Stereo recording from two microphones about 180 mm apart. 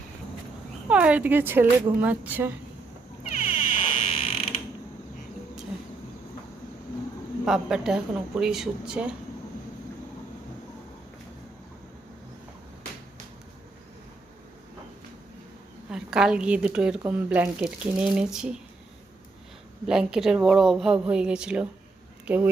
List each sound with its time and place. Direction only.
0.9 s a woman's voice: 5° right (ahead or behind)
3.2 s frog: 30° left (ahead or behind)
7.4 s a woman's voice: 5° right (ahead or behind)
15.9 s a woman's voice: 5° right (ahead or behind)
19.9 s a woman's voice: 5° right (ahead or behind)